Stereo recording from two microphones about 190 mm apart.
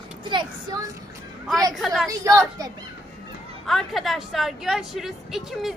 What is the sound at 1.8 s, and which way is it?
Speech, centre (ahead or behind).